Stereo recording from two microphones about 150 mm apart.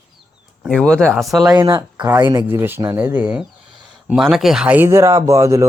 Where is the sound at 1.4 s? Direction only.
25° right (ahead or behind).